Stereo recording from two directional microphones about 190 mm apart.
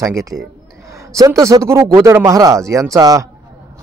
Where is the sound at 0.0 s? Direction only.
15° right (ahead or behind).